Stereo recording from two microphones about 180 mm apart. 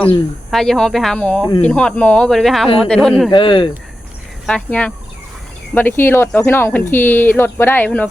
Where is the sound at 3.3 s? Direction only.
30° left (ahead or behind).